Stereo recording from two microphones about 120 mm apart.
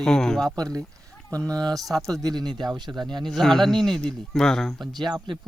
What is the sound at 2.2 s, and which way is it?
Speech, 35° right (ahead or behind).